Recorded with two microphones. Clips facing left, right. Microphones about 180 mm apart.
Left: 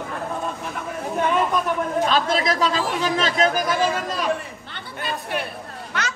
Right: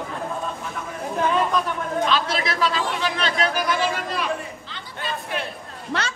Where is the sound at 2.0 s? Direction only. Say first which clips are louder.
Left 2 dB; 40° left (ahead or behind).